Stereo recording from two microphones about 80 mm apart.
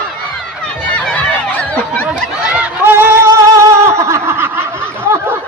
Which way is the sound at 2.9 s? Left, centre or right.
Right.